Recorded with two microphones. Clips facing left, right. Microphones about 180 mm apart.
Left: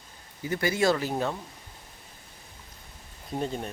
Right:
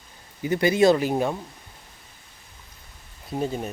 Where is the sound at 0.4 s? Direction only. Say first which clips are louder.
Right 7 dB; 20° right (ahead or behind).